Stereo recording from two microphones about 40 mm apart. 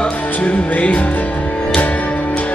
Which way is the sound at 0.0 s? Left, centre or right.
Left.